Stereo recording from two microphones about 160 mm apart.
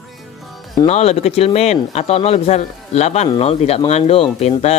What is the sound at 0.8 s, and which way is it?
Speech, 40° left (ahead or behind).